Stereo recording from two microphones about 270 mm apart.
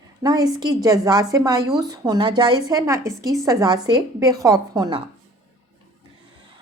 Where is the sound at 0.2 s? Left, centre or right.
Centre.